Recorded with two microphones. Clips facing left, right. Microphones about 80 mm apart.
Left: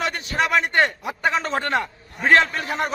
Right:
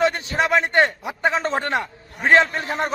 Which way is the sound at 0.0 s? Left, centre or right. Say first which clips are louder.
Right 3 dB; right.